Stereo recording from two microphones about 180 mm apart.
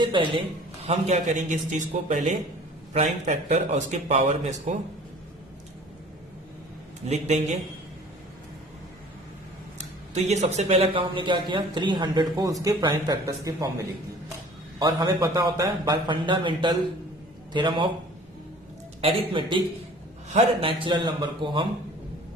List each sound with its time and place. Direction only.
0.0 s a man's voice: 25° right (ahead or behind)
7.0 s speech: 40° right (ahead or behind)
10.2 s a man's voice: 40° right (ahead or behind)
19.0 s a man's voice: 30° right (ahead or behind)